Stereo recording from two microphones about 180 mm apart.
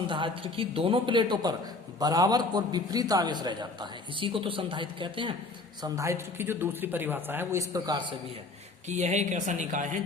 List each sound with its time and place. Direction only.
0.1 s a man's voice: 30° right (ahead or behind)
5.8 s speech: 15° right (ahead or behind)
8.9 s speech: 40° right (ahead or behind)